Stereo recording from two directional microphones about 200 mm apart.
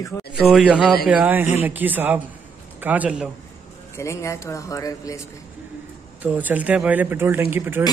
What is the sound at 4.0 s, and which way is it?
Speech, 15° left (ahead or behind).